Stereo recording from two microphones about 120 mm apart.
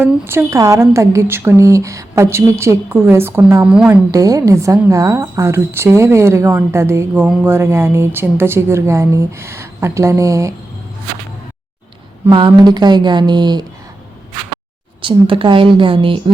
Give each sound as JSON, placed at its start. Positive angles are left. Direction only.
{"t": 0.0, "sound": "a woman's voice", "side_deg": -20}
{"t": 3.6, "sound": "a woman's voice", "side_deg": -5}
{"t": 4.1, "sound": "a woman's voice", "side_deg": -30}
{"t": 7.1, "sound": "a woman's voice", "side_deg": -15}
{"t": 12.3, "sound": "speech", "side_deg": -40}
{"t": 15.0, "sound": "a woman's voice", "side_deg": -45}